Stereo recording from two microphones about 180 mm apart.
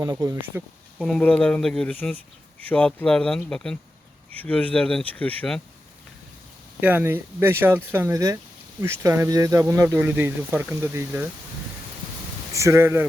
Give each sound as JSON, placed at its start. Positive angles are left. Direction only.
{"t": 0.0, "sound": "speech", "side_deg": -20}
{"t": 0.9, "sound": "speech", "side_deg": 0}
{"t": 6.7, "sound": "speech", "side_deg": -10}
{"t": 12.5, "sound": "speech", "side_deg": -15}